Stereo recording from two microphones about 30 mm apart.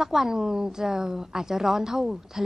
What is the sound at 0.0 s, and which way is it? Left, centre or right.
A woman's voice, centre.